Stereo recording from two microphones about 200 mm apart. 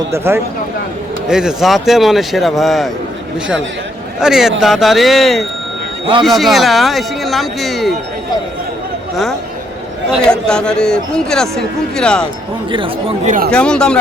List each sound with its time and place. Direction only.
0.1 s speech: 15° right (ahead or behind)
4.2 s speech: 5° right (ahead or behind)
10.1 s speech: 5° left (ahead or behind)
12.7 s speech: 25° right (ahead or behind)
13.5 s speech: 5° left (ahead or behind)